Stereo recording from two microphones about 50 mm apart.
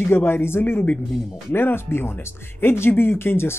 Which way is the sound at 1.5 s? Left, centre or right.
Left.